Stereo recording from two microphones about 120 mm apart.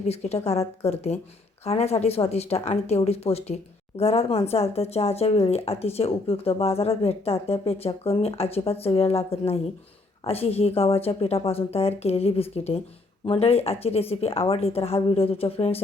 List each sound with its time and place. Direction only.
0.1 s speech: 60° left (ahead or behind)